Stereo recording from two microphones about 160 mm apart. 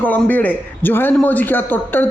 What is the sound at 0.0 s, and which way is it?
A man's voice, 10° left (ahead or behind).